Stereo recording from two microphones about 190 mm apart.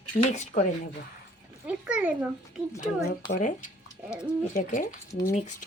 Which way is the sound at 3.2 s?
45° left (ahead or behind).